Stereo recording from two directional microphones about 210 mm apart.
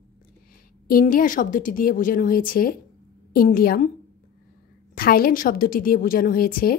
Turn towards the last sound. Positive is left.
turn(degrees=45)  # may be behind; listen again after turning